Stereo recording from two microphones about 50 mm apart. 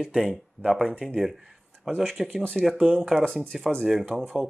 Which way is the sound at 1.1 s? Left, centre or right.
Centre.